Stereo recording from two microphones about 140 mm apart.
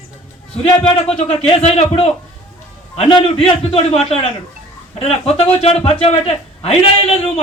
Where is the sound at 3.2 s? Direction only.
40° left (ahead or behind).